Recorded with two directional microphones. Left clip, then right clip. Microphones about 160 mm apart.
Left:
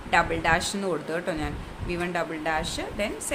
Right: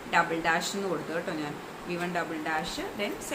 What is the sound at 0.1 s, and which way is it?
Speech, 90° left.